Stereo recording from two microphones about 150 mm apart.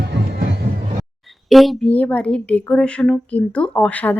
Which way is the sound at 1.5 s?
Centre (ahead or behind).